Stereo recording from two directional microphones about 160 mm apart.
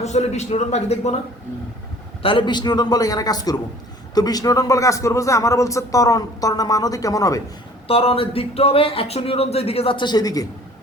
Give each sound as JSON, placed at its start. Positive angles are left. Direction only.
{"t": 0.0, "sound": "a man's voice", "side_deg": 45}
{"t": 2.2, "sound": "a man's voice", "side_deg": 30}
{"t": 7.9, "sound": "speech", "side_deg": 35}